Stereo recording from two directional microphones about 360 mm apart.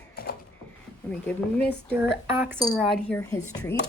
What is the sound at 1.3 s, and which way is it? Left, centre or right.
Speech, centre.